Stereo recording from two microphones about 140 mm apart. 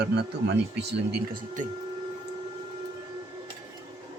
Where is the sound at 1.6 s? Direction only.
65° right (ahead or behind).